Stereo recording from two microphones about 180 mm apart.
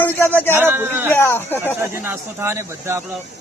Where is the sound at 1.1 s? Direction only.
10° left (ahead or behind).